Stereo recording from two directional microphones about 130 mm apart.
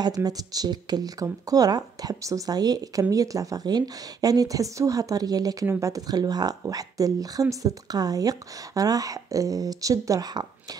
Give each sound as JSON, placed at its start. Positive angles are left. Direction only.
{"t": 0.0, "sound": "speech", "side_deg": -30}